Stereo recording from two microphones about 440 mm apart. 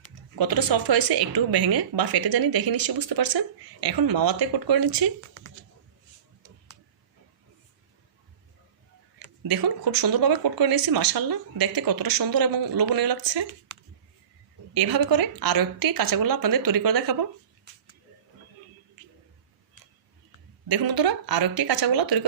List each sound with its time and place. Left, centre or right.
0.3 s a woman's voice: right
9.5 s a woman's voice: right
20.7 s a woman's voice: right